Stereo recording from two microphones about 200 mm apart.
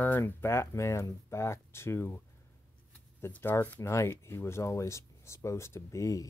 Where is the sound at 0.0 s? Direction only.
10° left (ahead or behind).